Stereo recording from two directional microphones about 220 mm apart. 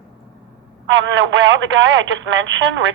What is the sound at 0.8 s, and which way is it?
Speech, 55° right (ahead or behind).